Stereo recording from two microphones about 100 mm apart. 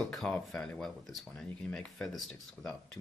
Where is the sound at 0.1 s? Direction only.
5° left (ahead or behind).